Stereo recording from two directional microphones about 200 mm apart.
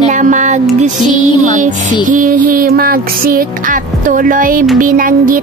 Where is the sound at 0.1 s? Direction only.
40° right (ahead or behind).